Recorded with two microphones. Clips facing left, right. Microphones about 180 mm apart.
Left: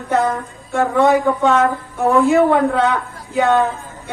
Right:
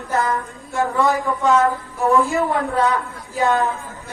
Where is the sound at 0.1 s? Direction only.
65° left (ahead or behind).